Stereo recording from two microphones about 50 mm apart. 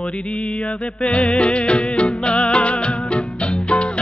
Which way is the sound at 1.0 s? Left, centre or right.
Left.